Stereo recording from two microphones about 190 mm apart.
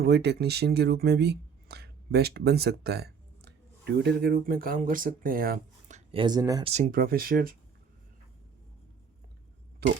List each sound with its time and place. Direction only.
0.0 s speech: 60° right (ahead or behind)
6.1 s speech: 25° right (ahead or behind)
6.7 s speech: 35° right (ahead or behind)
6.9 s speech: 50° right (ahead or behind)